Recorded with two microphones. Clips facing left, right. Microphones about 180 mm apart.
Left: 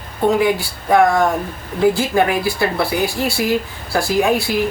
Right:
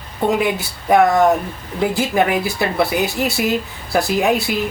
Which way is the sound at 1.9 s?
20° right (ahead or behind).